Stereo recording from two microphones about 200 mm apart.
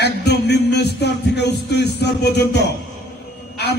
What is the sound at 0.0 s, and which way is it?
Music, 55° left (ahead or behind).